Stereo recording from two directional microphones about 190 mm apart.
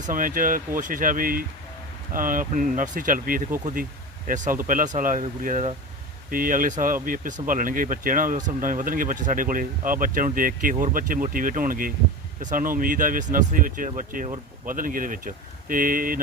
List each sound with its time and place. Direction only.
0.0 s speech: 45° right (ahead or behind)